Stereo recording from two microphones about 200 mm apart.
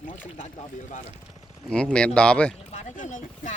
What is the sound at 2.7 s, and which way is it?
Speech, 40° left (ahead or behind).